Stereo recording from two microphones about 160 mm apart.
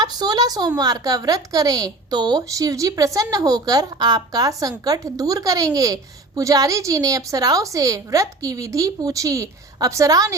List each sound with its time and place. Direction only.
0.0 s a woman's voice: 25° right (ahead or behind)